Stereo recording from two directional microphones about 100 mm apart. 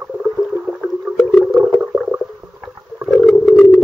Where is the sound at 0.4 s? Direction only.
Centre (ahead or behind).